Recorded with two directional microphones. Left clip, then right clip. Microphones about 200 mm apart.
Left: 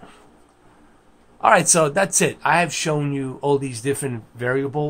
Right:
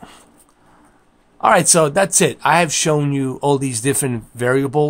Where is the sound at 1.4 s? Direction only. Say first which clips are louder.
Right 2 dB; 30° right (ahead or behind).